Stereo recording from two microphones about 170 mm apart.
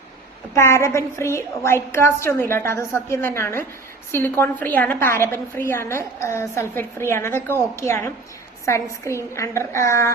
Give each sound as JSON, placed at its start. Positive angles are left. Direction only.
{"t": 0.5, "sound": "a woman's voice", "side_deg": 15}